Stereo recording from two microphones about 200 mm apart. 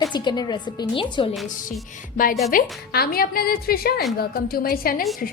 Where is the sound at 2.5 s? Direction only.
45° left (ahead or behind).